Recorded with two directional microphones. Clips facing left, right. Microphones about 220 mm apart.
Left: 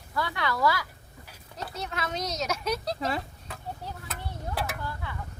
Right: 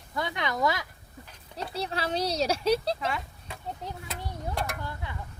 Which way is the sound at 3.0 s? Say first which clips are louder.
Left 2 dB; 35° left (ahead or behind).